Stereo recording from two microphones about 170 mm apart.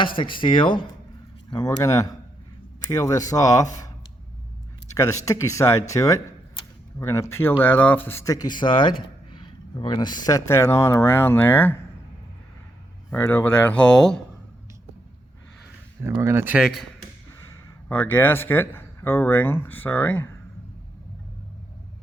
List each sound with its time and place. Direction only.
0.2 s speech: 30° left (ahead or behind)
4.9 s speech: 20° left (ahead or behind)
13.1 s speech: 15° left (ahead or behind)
16.0 s speech: 15° right (ahead or behind)
17.8 s speech: 10° left (ahead or behind)